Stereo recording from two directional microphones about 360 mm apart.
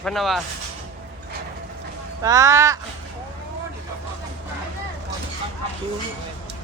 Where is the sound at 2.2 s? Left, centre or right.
Centre.